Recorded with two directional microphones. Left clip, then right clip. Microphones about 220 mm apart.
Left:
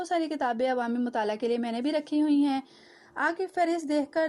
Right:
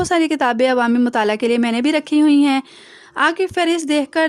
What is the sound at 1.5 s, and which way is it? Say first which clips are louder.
Speech: right 11 dB; 60° right (ahead or behind).